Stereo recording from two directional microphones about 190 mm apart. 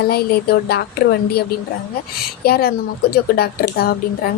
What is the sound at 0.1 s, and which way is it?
A woman's voice, 55° left (ahead or behind).